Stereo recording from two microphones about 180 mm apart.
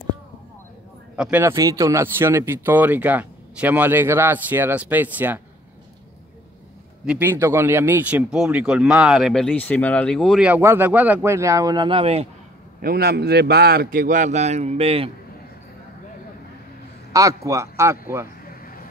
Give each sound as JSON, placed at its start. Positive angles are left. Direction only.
{"t": 1.1, "sound": "speech", "side_deg": -5}
{"t": 7.1, "sound": "speech", "side_deg": -10}
{"t": 12.8, "sound": "a man's voice", "side_deg": -60}
{"t": 17.1, "sound": "speech", "side_deg": -20}
{"t": 18.4, "sound": "a sound", "side_deg": 55}